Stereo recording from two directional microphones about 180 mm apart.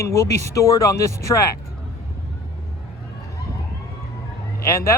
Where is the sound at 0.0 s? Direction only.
15° left (ahead or behind).